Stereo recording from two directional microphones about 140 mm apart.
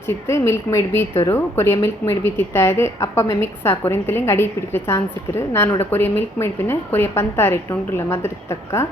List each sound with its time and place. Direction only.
0.3 s a woman's voice: 20° left (ahead or behind)